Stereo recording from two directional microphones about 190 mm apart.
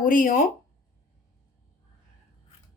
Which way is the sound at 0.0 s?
45° left (ahead or behind).